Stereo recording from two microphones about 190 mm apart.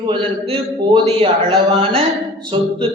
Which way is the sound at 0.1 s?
30° right (ahead or behind).